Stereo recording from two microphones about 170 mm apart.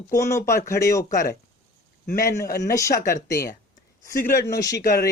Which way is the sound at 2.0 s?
60° left (ahead or behind).